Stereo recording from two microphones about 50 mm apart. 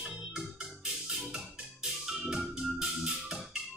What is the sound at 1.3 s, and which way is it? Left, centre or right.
Music, centre.